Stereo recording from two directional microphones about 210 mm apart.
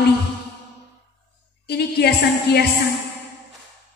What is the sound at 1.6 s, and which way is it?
Speech, 50° left (ahead or behind).